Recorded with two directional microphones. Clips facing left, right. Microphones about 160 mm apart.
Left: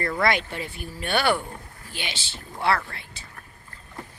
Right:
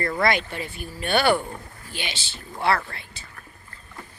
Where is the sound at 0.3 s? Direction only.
20° left (ahead or behind).